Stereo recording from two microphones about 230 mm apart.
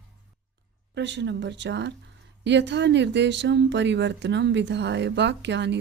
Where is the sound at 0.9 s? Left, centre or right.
Right.